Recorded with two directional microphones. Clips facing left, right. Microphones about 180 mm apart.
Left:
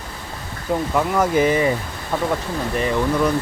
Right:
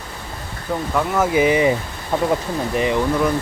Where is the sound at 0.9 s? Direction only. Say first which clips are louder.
Right 1 dB; centre (ahead or behind).